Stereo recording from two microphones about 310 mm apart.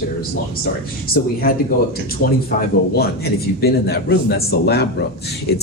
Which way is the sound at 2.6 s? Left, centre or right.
Left.